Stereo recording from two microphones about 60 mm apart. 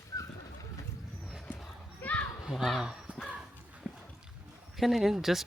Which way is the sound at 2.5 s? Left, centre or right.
Centre.